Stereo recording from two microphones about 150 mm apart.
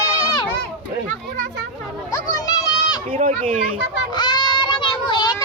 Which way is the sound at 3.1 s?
55° right (ahead or behind).